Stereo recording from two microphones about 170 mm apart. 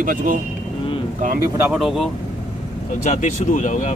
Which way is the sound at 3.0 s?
45° left (ahead or behind).